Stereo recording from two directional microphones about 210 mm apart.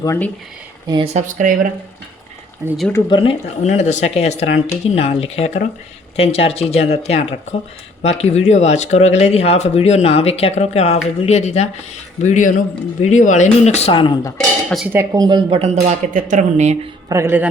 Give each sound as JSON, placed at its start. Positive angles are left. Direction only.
{"t": 0.0, "sound": "speech", "side_deg": 15}
{"t": 0.9, "sound": "speech", "side_deg": -25}
{"t": 2.6, "sound": "speech", "side_deg": 0}
{"t": 2.9, "sound": "speech", "side_deg": 25}
{"t": 14.3, "sound": "speech", "side_deg": 0}
{"t": 14.9, "sound": "speech", "side_deg": -20}
{"t": 17.1, "sound": "speech", "side_deg": -10}